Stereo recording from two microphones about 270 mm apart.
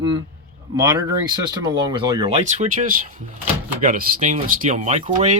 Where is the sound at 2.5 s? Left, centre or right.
Right.